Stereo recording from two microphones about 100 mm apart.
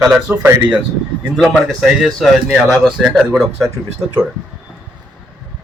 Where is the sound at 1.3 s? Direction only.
Centre (ahead or behind).